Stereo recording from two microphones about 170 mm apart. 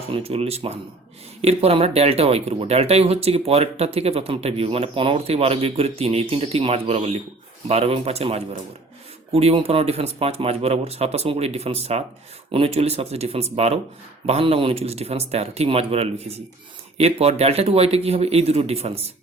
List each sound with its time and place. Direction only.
0.1 s speech: 35° right (ahead or behind)